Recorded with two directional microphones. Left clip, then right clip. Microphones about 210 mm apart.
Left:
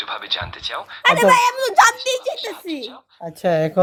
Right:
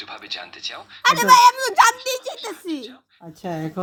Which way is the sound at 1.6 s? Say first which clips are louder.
Left 2 dB; 5° right (ahead or behind).